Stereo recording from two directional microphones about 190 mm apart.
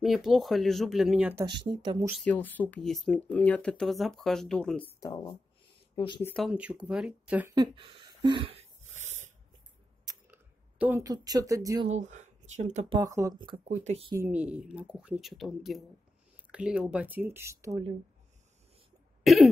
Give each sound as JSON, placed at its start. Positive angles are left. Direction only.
{"t": 0.0, "sound": "speech", "side_deg": 0}
{"t": 1.6, "sound": "speech", "side_deg": -25}
{"t": 2.1, "sound": "speech", "side_deg": 10}
{"t": 5.9, "sound": "speech", "side_deg": 25}
{"t": 6.2, "sound": "speech", "side_deg": 5}
{"t": 6.5, "sound": "speech", "side_deg": -5}
{"t": 7.5, "sound": "a sound", "side_deg": -25}
{"t": 10.0, "sound": "a sound", "side_deg": -10}
{"t": 11.9, "sound": "speech", "side_deg": -40}
{"t": 12.9, "sound": "speech", "side_deg": -20}
{"t": 13.7, "sound": "speech", "side_deg": -35}
{"t": 14.1, "sound": "speech", "side_deg": -10}
{"t": 19.2, "sound": "cough", "side_deg": 0}